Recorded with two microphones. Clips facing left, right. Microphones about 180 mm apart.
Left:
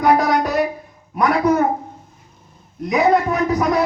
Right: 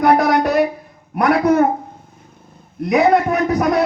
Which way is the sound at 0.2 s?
60° right (ahead or behind).